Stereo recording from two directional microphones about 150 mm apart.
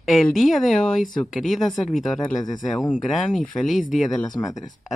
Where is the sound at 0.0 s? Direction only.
Centre (ahead or behind).